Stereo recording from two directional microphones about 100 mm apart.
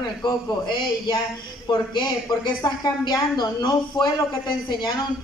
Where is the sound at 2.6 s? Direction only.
40° left (ahead or behind).